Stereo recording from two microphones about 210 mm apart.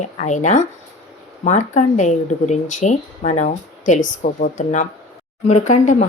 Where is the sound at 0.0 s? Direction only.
35° left (ahead or behind).